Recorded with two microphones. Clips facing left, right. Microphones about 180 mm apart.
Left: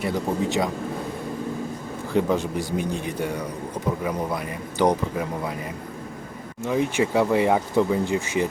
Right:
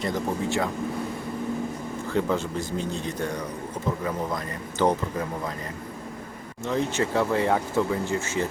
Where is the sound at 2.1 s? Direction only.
15° left (ahead or behind).